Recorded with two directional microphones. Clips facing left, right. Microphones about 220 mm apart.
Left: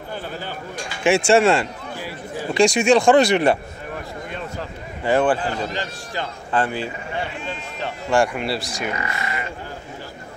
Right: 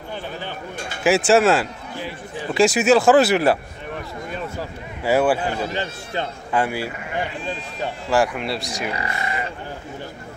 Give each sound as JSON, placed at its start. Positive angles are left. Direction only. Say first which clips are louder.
{"t": 1.0, "sound": "speech", "louder": "even", "side_deg": 0}
{"t": 4.6, "sound": "speech", "louder": "right 1 dB", "side_deg": -10}
{"t": 8.9, "sound": "speech", "louder": "right 1 dB", "side_deg": -30}